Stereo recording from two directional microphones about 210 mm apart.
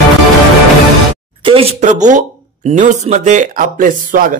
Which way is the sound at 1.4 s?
25° right (ahead or behind).